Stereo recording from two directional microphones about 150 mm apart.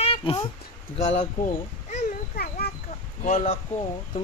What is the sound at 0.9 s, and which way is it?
Speech, 50° left (ahead or behind).